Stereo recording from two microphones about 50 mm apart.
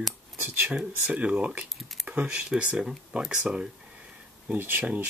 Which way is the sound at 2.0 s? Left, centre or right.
Right.